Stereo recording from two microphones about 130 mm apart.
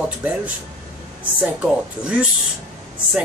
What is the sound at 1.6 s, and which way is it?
Speech, 10° right (ahead or behind).